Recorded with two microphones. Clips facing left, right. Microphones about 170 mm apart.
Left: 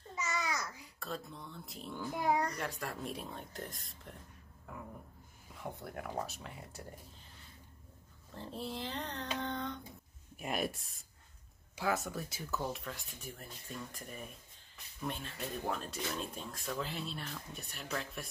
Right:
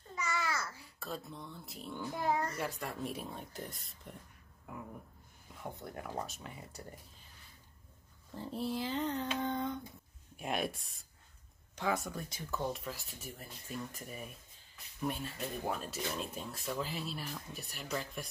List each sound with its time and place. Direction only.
0.1 s babbling: 20° left (ahead or behind)
0.9 s speech: centre (ahead or behind)
2.1 s a child's voice: 15° left (ahead or behind)
2.4 s speech: centre (ahead or behind)
5.6 s speech: centre (ahead or behind)
8.4 s speech: 5° right (ahead or behind)